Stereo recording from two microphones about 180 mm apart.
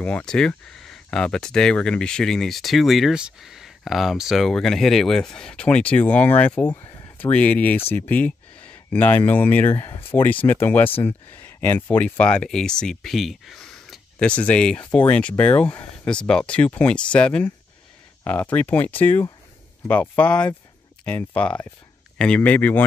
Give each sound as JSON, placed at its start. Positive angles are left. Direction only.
{"t": 0.0, "sound": "speech", "side_deg": 5}
{"t": 6.7, "sound": "a sound", "side_deg": 20}
{"t": 7.2, "sound": "speech", "side_deg": 10}